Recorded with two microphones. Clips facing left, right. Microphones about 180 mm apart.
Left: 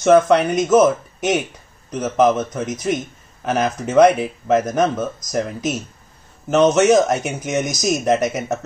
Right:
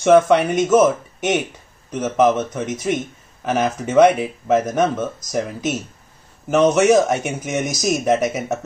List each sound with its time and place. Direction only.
0.0 s speech: 5° right (ahead or behind)